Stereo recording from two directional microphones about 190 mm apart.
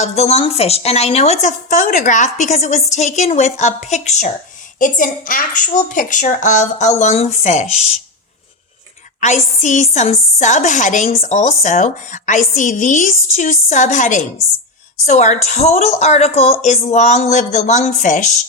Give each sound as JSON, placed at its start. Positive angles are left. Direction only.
{"t": 0.0, "sound": "a woman's voice", "side_deg": 35}
{"t": 9.2, "sound": "a woman's voice", "side_deg": 40}